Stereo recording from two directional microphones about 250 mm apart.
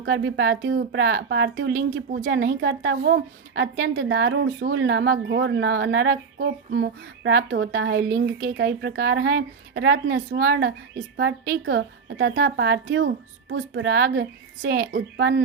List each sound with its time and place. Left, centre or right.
0.0 s speech: right